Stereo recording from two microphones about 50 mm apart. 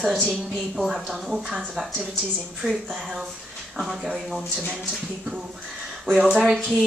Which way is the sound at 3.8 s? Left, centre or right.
Centre.